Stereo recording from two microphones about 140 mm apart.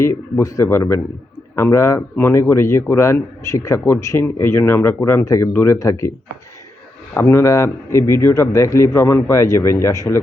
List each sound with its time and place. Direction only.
0.0 s a man's voice: 20° left (ahead or behind)